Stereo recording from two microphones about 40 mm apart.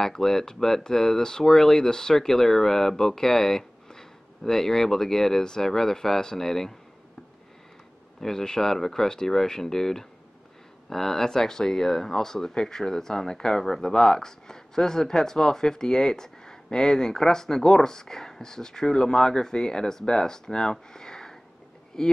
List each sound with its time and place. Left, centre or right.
0.0 s speech: centre
8.2 s speech: centre
20.7 s a sound: centre
22.0 s speech: centre